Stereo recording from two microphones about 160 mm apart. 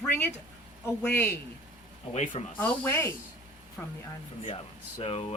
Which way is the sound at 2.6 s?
10° left (ahead or behind).